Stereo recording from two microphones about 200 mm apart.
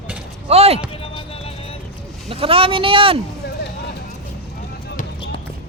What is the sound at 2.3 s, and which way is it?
Speech, 30° right (ahead or behind).